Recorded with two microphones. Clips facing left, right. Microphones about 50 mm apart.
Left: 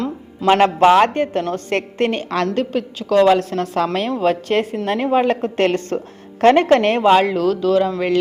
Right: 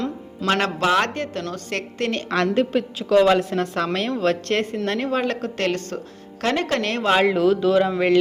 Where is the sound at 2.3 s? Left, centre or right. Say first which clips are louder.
Even; centre; by 7.1 s left.